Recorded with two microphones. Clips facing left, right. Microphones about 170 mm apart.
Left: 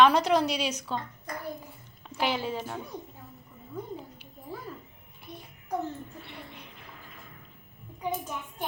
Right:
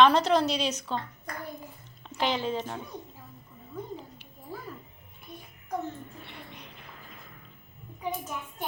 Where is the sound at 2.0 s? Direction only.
10° left (ahead or behind).